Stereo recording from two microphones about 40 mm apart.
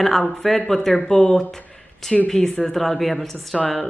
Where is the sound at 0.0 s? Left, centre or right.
Centre.